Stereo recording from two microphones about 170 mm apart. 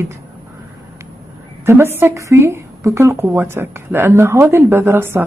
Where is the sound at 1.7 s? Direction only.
15° right (ahead or behind).